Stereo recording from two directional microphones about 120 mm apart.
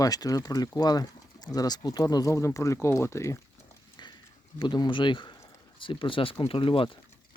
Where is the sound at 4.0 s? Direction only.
35° left (ahead or behind).